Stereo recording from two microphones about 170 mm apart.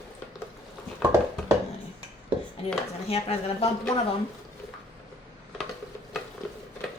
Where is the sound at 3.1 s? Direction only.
35° left (ahead or behind).